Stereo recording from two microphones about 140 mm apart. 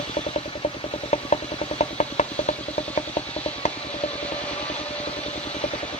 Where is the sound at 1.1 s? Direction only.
50° left (ahead or behind).